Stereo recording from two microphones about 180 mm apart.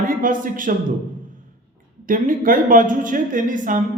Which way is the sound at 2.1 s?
50° right (ahead or behind).